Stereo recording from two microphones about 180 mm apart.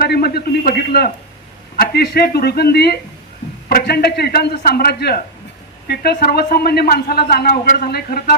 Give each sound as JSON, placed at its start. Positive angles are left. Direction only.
{"t": 0.0, "sound": "a man's voice", "side_deg": 60}